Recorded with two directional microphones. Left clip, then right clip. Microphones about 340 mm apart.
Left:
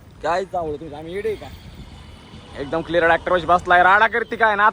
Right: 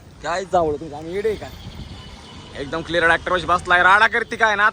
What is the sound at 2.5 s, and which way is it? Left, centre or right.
Speech, centre.